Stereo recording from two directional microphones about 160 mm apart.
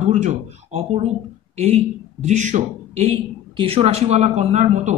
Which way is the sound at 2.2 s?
50° right (ahead or behind).